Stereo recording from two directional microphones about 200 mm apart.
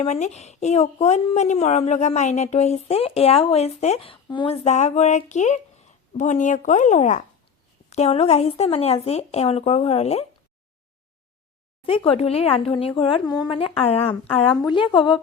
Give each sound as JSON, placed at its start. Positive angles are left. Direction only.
{"t": 0.0, "sound": "speech", "side_deg": 35}
{"t": 11.8, "sound": "speech", "side_deg": 30}